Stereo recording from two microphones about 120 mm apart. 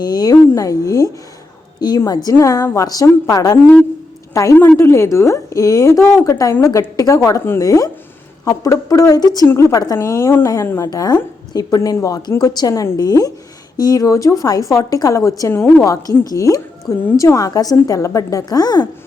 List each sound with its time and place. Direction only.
0.0 s a woman's voice: 35° left (ahead or behind)